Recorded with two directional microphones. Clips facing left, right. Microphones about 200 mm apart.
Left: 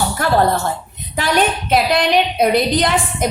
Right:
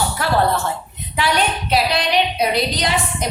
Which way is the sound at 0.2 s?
45° left (ahead or behind).